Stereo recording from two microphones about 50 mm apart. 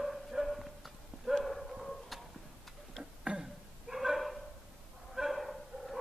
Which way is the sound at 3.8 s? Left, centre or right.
Centre.